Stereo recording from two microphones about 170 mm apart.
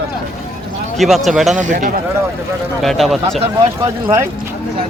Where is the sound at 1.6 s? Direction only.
50° right (ahead or behind).